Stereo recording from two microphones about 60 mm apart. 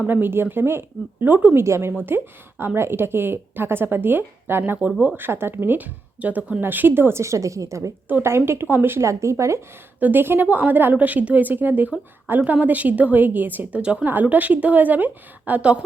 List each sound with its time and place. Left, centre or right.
0.1 s speech: right
1.5 s a woman's voice: right
1.9 s speech: right
8.2 s speech: right
9.0 s speech: right
10.0 s a woman's voice: right
13.8 s a woman's voice: right